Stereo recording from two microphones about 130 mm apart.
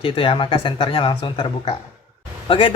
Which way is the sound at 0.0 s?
40° left (ahead or behind).